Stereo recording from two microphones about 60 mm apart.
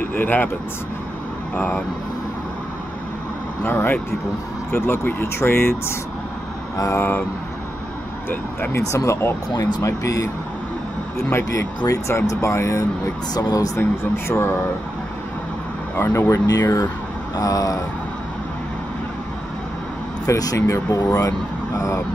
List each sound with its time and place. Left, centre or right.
0.1 s speech: left
3.6 s speech: left
8.7 s speech: left
9.6 s speech: left
11.1 s speech: left
12.1 s speech: left
13.3 s speech: left
13.7 s speech: left
16.0 s speech: left
16.3 s speech: left
20.2 s speech: left
21.7 s speech: left